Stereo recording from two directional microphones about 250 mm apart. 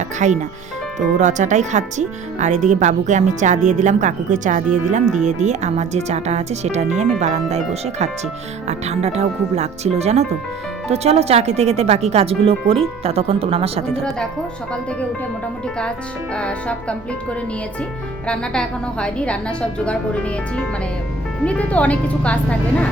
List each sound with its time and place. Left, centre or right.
0.2 s speech: right
13.8 s a woman's voice: centre
16.3 s a woman's voice: centre
18.3 s a woman's voice: centre